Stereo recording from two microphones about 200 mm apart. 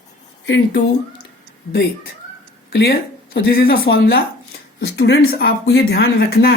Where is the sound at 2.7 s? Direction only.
55° left (ahead or behind).